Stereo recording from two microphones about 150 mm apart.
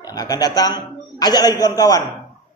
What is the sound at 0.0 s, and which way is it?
A man's voice, 25° left (ahead or behind).